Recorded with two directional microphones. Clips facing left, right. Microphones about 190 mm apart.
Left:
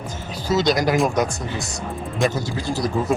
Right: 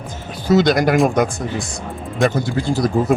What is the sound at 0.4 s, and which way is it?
Speech, 55° right (ahead or behind).